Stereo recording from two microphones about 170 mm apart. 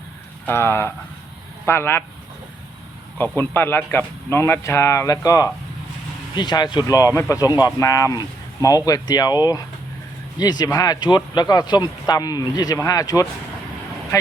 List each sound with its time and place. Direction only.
0.4 s speech: 15° left (ahead or behind)
3.3 s speech: 15° left (ahead or behind)